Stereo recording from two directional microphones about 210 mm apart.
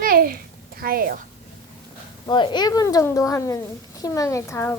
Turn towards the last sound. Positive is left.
turn(degrees=15)  # may be behind; listen again after turning